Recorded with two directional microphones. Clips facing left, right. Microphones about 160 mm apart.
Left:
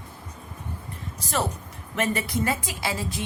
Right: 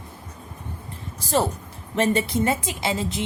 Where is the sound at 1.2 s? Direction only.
30° right (ahead or behind).